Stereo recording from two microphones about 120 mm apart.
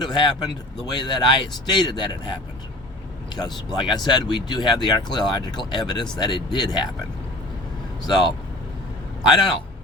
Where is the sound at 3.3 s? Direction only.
35° left (ahead or behind).